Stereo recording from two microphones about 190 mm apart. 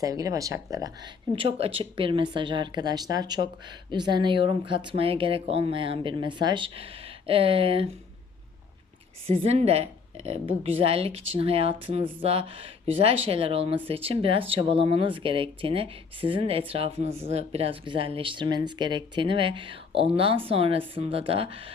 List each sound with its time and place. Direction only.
0.0 s speech: 20° right (ahead or behind)
9.2 s speech: 30° right (ahead or behind)